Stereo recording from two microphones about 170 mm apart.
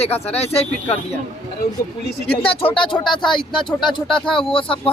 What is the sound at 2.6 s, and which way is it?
Speech, 30° left (ahead or behind).